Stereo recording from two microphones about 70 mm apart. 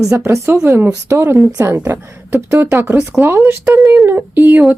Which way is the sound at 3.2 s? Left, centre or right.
Right.